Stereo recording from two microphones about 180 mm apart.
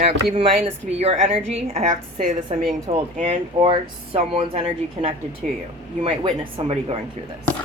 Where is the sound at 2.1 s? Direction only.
45° right (ahead or behind).